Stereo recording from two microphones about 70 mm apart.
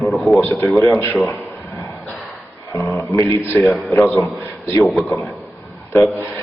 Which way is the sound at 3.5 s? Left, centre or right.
Centre.